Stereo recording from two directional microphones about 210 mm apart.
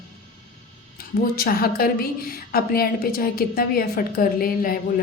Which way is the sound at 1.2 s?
45° left (ahead or behind).